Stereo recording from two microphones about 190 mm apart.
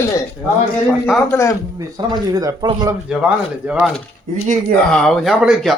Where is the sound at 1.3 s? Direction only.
15° left (ahead or behind).